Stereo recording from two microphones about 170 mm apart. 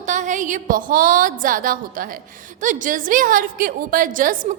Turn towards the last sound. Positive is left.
turn(degrees=-50)  # may be behind; listen again after turning